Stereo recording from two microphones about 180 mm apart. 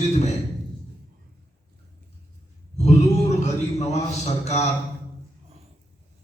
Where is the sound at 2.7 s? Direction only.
40° left (ahead or behind).